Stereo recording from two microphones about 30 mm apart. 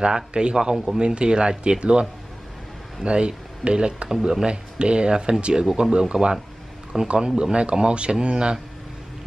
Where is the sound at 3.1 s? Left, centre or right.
Right.